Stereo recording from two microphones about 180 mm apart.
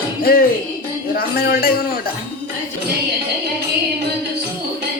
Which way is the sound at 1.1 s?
55° left (ahead or behind).